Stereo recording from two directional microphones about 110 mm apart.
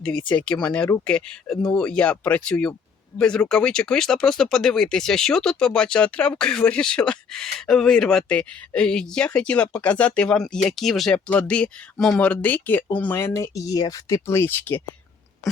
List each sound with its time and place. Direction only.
0.3 s speech: 10° left (ahead or behind)